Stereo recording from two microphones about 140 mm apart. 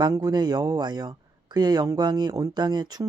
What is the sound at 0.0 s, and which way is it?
Speech, 30° right (ahead or behind).